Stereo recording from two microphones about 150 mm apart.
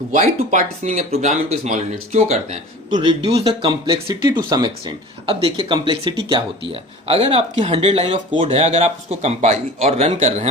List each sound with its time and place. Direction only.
0.1 s speech: 50° right (ahead or behind)
3.8 s speech: 30° right (ahead or behind); by 10.5 s 50° right (ahead or behind)